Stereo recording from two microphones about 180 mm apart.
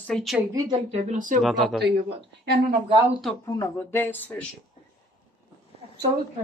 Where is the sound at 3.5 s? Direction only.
15° left (ahead or behind).